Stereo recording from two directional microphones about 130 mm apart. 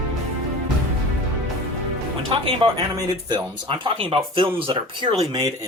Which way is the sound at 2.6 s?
30° right (ahead or behind).